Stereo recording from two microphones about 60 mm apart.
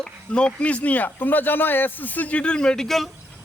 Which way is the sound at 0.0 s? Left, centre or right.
Centre.